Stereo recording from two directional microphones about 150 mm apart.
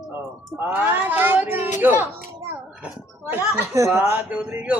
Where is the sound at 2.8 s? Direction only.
15° right (ahead or behind).